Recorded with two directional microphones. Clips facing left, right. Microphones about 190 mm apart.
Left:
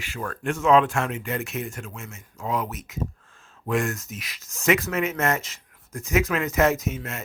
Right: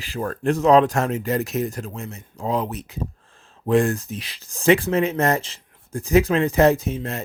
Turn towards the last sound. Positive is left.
turn(degrees=-35)  # may be behind; listen again after turning